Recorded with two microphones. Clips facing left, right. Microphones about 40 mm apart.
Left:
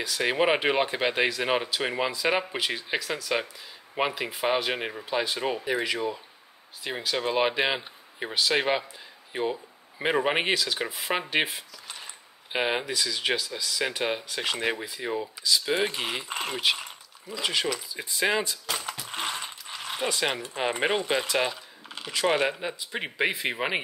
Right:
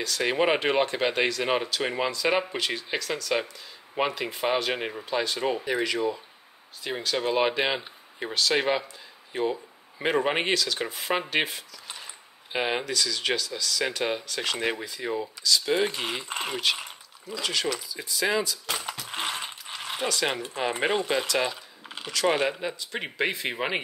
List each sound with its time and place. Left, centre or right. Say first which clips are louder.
0.0 s speech: even; centre
17.3 s speech: left 1 dB; centre
17.9 s speech: left 3 dB; left
18.7 s mechanisms: even; centre
19.0 s ratchet: right 2 dB; centre
20.7 s speech: right 1 dB; centre